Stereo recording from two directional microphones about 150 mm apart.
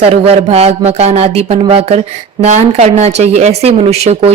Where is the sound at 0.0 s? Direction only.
45° right (ahead or behind).